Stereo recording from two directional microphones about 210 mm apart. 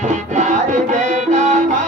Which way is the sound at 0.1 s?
35° right (ahead or behind).